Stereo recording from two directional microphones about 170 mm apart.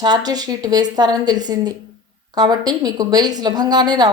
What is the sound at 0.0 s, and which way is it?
A woman's voice, 25° right (ahead or behind).